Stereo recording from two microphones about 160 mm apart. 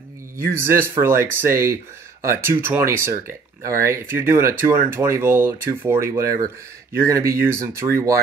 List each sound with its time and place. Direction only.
0.6 s speech: 15° right (ahead or behind)